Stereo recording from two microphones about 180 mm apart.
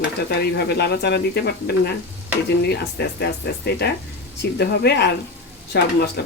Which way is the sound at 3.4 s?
75° left (ahead or behind).